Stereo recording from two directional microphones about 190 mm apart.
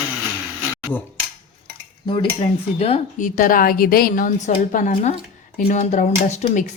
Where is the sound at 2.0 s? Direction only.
25° left (ahead or behind).